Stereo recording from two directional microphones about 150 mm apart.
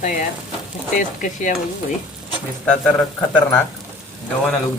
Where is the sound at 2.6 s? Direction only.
5° left (ahead or behind).